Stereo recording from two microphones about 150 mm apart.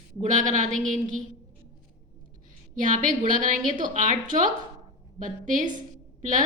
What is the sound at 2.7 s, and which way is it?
A woman's voice, 60° right (ahead or behind).